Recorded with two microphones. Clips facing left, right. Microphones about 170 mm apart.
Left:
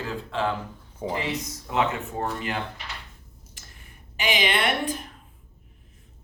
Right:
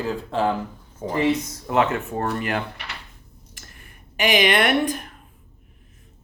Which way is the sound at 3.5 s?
65° right (ahead or behind).